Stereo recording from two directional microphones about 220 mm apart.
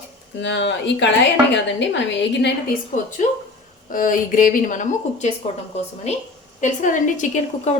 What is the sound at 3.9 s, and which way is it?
A woman's voice, 40° left (ahead or behind).